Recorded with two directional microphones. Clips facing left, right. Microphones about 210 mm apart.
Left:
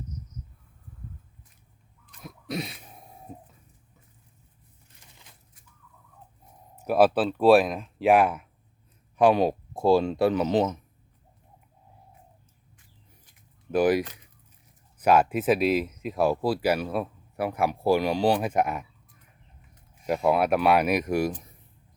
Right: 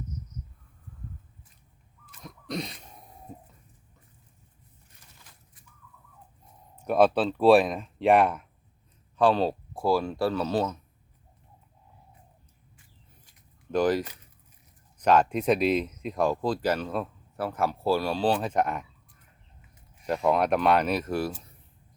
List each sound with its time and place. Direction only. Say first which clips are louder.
2.2 s throat clearing: left 1 dB; 5° left (ahead or behind)
6.8 s speech: left 1 dB; 5° left (ahead or behind)
9.1 s speech: left 3 dB; 15° left (ahead or behind)
13.7 s speech: left 2 dB; 10° left (ahead or behind)
20.1 s speech: left 1 dB; 10° left (ahead or behind)